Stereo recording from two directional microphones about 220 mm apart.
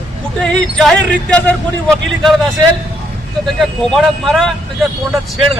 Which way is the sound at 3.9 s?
Centre (ahead or behind).